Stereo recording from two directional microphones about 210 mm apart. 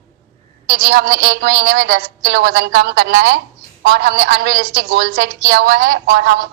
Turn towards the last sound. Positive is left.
turn(degrees=-50)  # may be behind; listen again after turning